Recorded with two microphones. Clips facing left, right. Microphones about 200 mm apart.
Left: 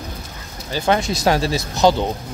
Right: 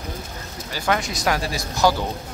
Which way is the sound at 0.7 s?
25° left (ahead or behind).